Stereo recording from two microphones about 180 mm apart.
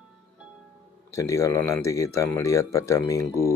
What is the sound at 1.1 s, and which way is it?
Speech, 15° left (ahead or behind).